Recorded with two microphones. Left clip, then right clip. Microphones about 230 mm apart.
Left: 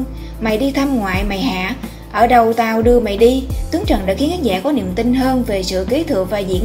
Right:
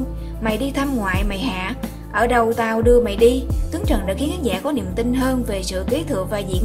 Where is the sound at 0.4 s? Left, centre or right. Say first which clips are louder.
Left 5 dB; centre.